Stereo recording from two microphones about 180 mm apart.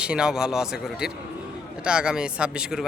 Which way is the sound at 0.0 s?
5° right (ahead or behind).